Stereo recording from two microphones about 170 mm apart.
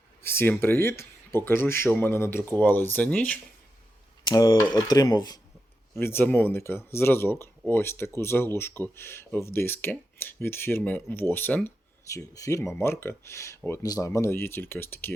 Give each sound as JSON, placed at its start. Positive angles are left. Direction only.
{"t": 0.3, "sound": "speech", "side_deg": 15}
{"t": 4.3, "sound": "speech", "side_deg": 20}
{"t": 6.0, "sound": "speech", "side_deg": 15}